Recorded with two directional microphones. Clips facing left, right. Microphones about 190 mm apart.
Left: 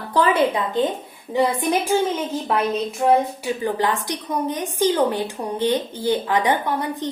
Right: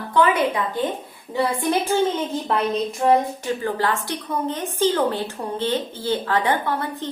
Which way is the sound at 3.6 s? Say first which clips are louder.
Left 3 dB; 15° left (ahead or behind).